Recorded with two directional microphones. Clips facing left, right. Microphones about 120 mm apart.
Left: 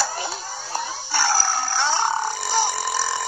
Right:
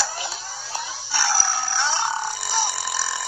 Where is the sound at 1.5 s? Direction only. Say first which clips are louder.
Left 2 dB; 45° left (ahead or behind).